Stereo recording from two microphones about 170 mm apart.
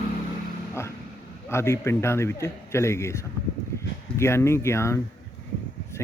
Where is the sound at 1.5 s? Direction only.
15° left (ahead or behind).